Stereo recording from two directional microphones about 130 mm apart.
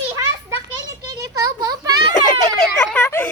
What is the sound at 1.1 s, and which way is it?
A child's voice, 25° right (ahead or behind).